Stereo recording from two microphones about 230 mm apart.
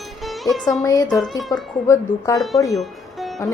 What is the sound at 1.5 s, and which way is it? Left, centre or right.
Speech, centre.